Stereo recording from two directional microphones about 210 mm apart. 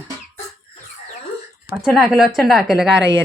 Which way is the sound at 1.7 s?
45° left (ahead or behind).